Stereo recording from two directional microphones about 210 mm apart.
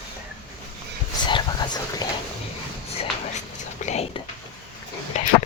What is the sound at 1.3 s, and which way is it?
Whispering, 20° left (ahead or behind).